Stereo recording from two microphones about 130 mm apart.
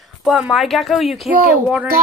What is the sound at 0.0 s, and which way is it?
Speech, 5° right (ahead or behind).